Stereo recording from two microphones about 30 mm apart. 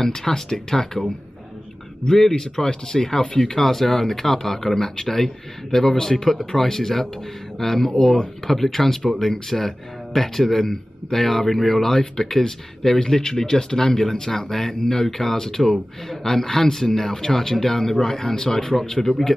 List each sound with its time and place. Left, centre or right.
0.0 s speech: centre
2.0 s speech: centre